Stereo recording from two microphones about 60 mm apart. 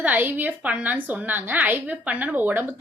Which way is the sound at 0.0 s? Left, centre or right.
Right.